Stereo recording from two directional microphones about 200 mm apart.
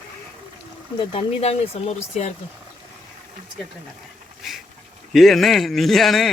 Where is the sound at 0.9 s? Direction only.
30° left (ahead or behind).